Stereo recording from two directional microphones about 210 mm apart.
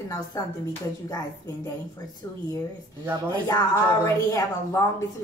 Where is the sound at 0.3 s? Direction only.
15° left (ahead or behind).